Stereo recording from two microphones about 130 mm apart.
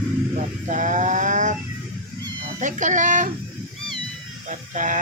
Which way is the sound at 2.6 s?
75° right (ahead or behind).